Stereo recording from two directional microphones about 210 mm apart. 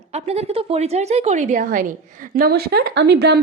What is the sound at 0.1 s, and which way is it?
A woman's voice, 30° right (ahead or behind).